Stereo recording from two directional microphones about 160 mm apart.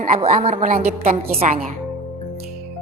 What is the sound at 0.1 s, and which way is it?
A woman's voice, 40° right (ahead or behind).